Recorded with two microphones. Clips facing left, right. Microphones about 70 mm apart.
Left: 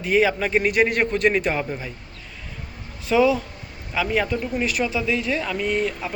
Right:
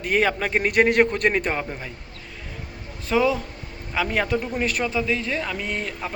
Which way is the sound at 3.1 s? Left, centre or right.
Right.